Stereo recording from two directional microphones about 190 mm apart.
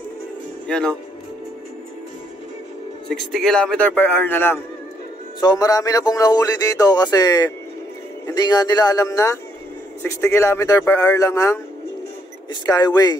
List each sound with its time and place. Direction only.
0.7 s speech: 5° left (ahead or behind)
3.1 s speech: centre (ahead or behind)
12.6 s speech: 20° left (ahead or behind)